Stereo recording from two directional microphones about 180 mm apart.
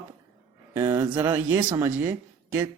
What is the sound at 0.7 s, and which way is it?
Speech, 15° right (ahead or behind).